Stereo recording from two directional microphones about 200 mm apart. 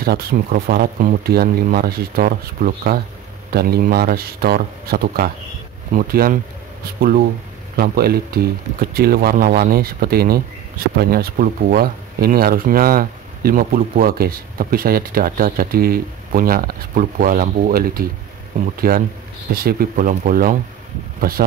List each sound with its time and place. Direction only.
0.0 s speech: 50° right (ahead or behind)